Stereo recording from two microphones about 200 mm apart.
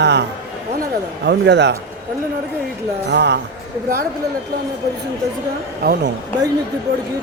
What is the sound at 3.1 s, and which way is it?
Speech, 60° right (ahead or behind).